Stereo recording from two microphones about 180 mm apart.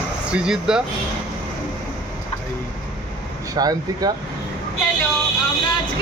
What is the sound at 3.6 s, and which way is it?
Speech, 20° right (ahead or behind).